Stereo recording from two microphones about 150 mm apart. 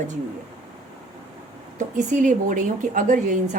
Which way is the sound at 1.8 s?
60° right (ahead or behind).